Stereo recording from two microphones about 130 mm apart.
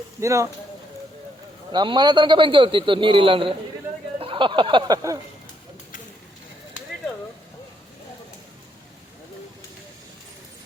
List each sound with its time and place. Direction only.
0.2 s speech: 25° right (ahead or behind)
1.7 s a man's voice: 35° right (ahead or behind)
4.2 s a sound: 40° right (ahead or behind)